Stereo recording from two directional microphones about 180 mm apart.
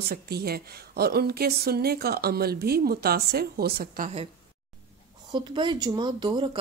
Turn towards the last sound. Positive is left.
turn(degrees=-25)  # may be behind; listen again after turning